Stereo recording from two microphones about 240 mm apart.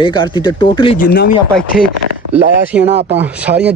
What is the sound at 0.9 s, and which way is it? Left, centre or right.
Speech, left.